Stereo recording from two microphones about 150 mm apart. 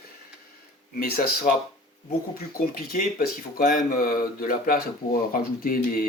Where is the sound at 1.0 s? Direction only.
75° left (ahead or behind).